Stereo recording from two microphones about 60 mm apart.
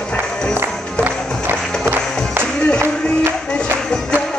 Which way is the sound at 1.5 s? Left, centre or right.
Right.